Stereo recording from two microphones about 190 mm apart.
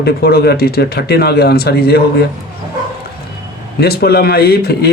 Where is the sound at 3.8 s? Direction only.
55° left (ahead or behind).